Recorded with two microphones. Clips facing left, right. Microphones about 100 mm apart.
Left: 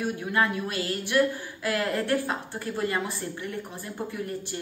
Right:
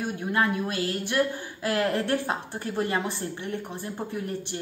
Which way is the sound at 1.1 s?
30° right (ahead or behind).